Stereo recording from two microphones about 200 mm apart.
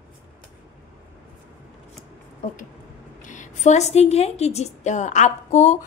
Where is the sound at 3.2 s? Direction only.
40° left (ahead or behind).